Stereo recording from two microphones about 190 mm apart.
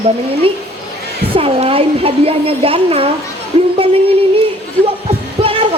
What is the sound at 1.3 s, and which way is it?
Speech, 30° right (ahead or behind).